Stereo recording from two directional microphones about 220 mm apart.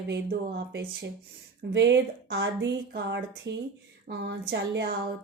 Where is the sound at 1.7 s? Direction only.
55° right (ahead or behind).